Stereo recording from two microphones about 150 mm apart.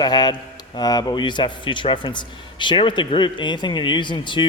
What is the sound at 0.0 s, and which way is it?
A man's voice, 30° left (ahead or behind).